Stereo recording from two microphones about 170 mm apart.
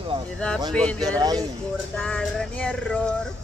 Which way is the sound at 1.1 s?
25° right (ahead or behind).